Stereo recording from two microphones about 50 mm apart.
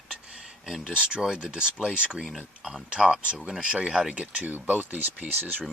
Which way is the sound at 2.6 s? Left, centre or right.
Centre.